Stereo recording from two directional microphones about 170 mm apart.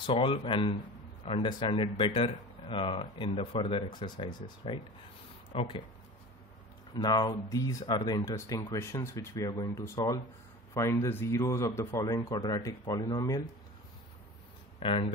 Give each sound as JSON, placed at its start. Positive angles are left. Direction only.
{"t": 0.0, "sound": "speech", "side_deg": 30}
{"t": 7.0, "sound": "a man's voice", "side_deg": 25}
{"t": 14.8, "sound": "speech", "side_deg": 30}